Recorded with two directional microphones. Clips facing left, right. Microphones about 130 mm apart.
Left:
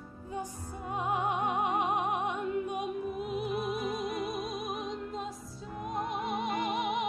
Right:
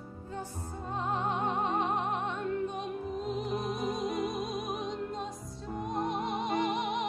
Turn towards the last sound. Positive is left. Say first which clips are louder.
# right 1 dB
turn(degrees=5)  # may be behind; listen again after turning